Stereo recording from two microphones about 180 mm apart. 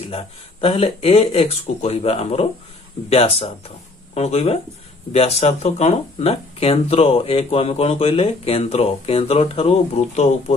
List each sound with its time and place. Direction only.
0.1 s speech: 30° left (ahead or behind)